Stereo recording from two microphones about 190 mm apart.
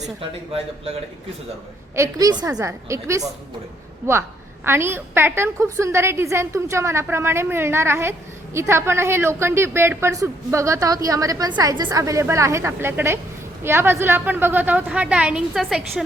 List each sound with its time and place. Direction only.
0.0 s speech: 30° right (ahead or behind)
2.0 s a woman's voice: 20° right (ahead or behind); by 16.0 s centre (ahead or behind)